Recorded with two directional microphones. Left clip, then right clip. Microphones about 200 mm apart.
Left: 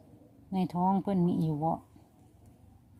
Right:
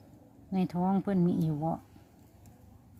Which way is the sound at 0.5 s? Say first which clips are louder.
Left 2 dB; 5° left (ahead or behind).